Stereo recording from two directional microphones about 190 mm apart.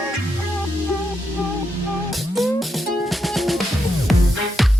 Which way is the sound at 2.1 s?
Centre (ahead or behind).